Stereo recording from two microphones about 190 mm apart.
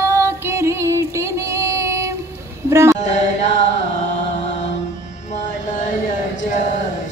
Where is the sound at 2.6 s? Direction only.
15° right (ahead or behind).